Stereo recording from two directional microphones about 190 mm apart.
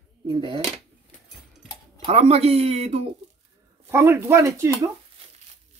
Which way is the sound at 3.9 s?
15° right (ahead or behind).